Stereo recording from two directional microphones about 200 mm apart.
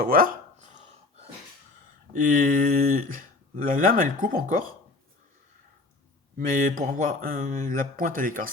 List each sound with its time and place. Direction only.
0.0 s a sound: 45° right (ahead or behind)
2.2 s speech: 40° right (ahead or behind)
6.3 s speech: 40° right (ahead or behind)